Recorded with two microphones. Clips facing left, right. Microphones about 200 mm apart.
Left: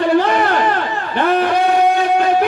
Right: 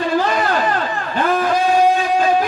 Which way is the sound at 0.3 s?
65° left (ahead or behind).